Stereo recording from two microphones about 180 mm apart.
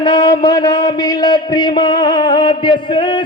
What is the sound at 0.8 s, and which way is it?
Music, 20° left (ahead or behind).